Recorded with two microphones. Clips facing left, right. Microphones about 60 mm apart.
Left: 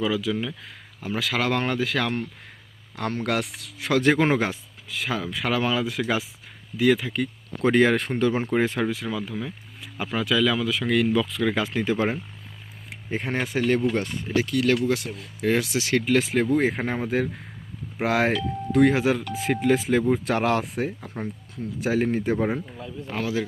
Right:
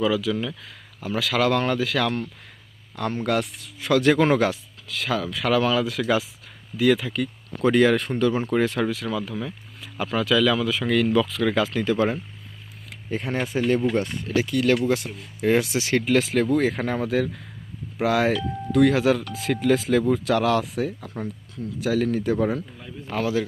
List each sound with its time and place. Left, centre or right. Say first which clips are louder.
0.1 s speech: right 2 dB; left
3.0 s speech: right 2 dB; left
3.8 s speech: right 2 dB; left
7.6 s speech: right 1 dB; left
9.0 s speech: right 2 dB; centre
11.9 s speech: right 2 dB; left
13.1 s speech: right 1 dB; left
14.3 s speech: right 1 dB; centre
16.6 s speech: right 1 dB; left
18.0 s speech: right 1 dB; left
18.9 s speech: right 2 dB; centre
20.2 s speech: right 2 dB; left
23.1 s speech: right 4 dB; centre